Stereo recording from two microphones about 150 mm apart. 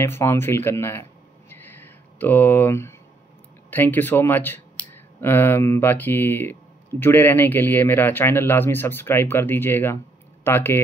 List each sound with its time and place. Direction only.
0.0 s a man's voice: 15° left (ahead or behind)
1.5 s a sound: 15° left (ahead or behind)
3.7 s a man's voice: 15° left (ahead or behind)